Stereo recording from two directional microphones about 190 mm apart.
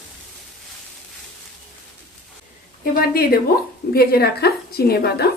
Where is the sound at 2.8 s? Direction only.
50° left (ahead or behind).